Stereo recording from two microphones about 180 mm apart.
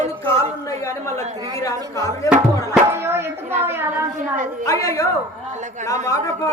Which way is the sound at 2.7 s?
15° right (ahead or behind).